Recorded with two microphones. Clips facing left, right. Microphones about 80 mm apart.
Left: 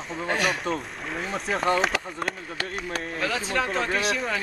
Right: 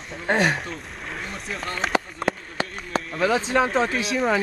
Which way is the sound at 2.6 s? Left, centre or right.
Right.